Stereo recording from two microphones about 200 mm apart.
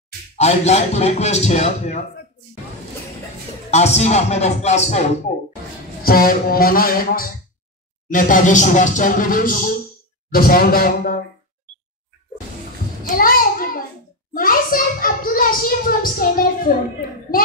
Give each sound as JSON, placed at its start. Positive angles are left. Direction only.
{"t": 0.4, "sound": "speech", "side_deg": 35}
{"t": 3.7, "sound": "speech", "side_deg": 35}
{"t": 6.0, "sound": "a child's voice", "side_deg": 45}
{"t": 13.0, "sound": "a sound", "side_deg": 45}
{"t": 14.3, "sound": "a child's voice", "side_deg": 45}